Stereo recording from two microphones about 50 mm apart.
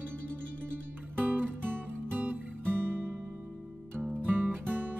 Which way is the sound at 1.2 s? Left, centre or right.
Right.